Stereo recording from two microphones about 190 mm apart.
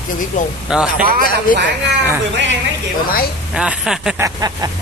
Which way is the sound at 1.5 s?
45° left (ahead or behind).